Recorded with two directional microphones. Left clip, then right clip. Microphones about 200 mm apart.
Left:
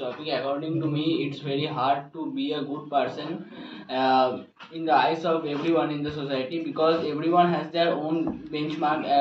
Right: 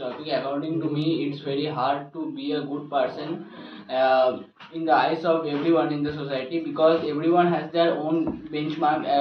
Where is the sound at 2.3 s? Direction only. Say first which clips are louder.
Even; 15° left (ahead or behind).